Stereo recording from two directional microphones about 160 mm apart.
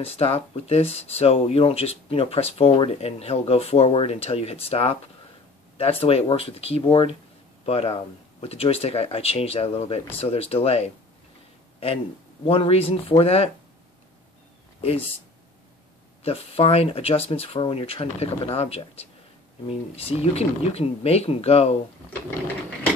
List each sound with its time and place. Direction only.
0.0 s speech: 40° left (ahead or behind)
12.4 s speech: 35° left (ahead or behind)
16.3 s speech: 40° left (ahead or behind)